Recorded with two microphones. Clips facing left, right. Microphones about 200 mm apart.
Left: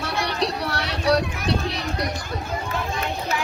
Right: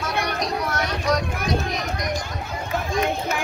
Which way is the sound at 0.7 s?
35° left (ahead or behind).